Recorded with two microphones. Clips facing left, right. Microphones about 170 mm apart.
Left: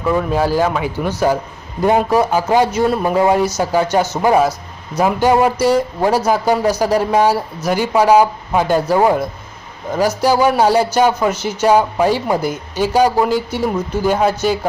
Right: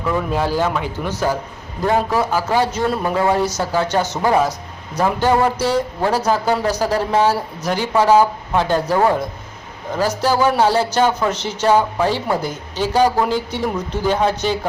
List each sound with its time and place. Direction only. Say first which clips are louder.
0.3 s a man's voice: left 3 dB; 5° left (ahead or behind)